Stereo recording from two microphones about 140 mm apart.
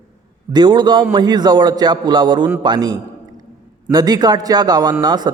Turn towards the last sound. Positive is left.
turn(degrees=-30)  # may be behind; listen again after turning